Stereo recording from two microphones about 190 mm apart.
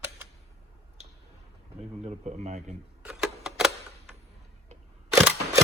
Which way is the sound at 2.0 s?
35° right (ahead or behind).